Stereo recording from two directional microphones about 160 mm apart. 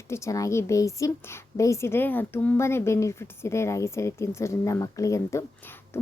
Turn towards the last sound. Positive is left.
turn(degrees=20)  # may be behind; listen again after turning